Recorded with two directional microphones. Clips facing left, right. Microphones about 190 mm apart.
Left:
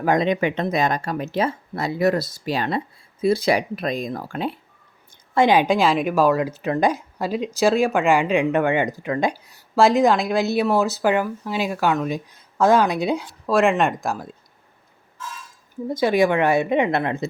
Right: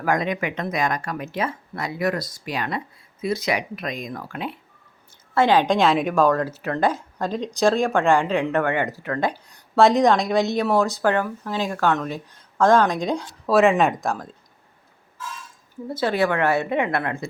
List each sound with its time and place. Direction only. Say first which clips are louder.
0.0 s speech: left 4 dB; 25° left (ahead or behind)
5.3 s a woman's voice: left 1 dB; 15° left (ahead or behind)
15.9 s a woman's voice: left 3 dB; 15° left (ahead or behind)